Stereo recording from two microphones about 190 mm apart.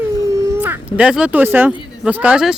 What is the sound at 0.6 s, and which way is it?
Speech, 5° right (ahead or behind).